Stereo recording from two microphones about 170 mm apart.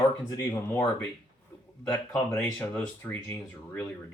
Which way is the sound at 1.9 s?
15° left (ahead or behind).